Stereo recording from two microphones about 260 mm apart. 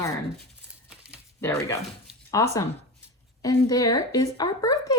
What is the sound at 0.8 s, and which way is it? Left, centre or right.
Crumpling, centre.